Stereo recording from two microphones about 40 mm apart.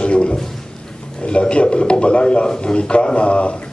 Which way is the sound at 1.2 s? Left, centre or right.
Left.